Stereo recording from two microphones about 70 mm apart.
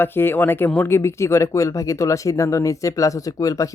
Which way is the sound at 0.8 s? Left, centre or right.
Left.